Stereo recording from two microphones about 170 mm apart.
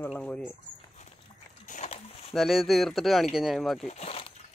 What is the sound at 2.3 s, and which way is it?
Speech, centre (ahead or behind).